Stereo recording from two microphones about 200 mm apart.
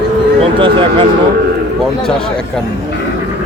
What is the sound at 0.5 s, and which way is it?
Speech, 25° right (ahead or behind).